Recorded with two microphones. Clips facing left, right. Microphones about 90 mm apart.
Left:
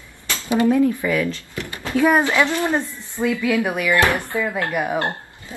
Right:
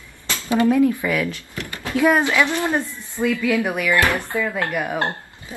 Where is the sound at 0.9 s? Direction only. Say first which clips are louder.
Left 1 dB; 15° right (ahead or behind).